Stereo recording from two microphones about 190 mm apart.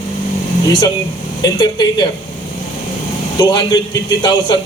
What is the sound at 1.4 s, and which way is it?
Speech, 20° left (ahead or behind).